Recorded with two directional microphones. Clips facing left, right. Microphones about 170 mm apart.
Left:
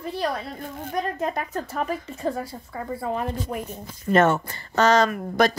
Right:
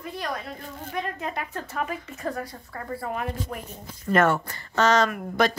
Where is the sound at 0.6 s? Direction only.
40° left (ahead or behind).